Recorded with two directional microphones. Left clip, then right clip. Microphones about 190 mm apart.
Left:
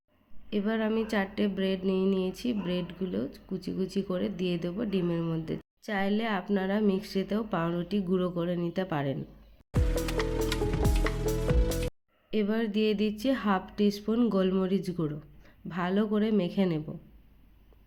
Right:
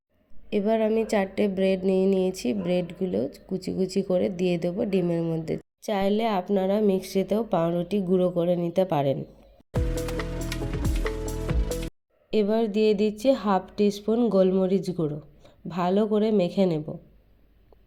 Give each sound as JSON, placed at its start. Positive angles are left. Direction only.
{"t": 0.5, "sound": "speech", "side_deg": -20}
{"t": 9.9, "sound": "music", "side_deg": 0}
{"t": 12.3, "sound": "speech", "side_deg": -15}
{"t": 16.0, "sound": "speech", "side_deg": 15}